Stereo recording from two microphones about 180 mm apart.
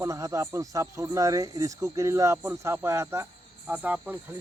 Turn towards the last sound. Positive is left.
turn(degrees=-10)  # may be behind; listen again after turning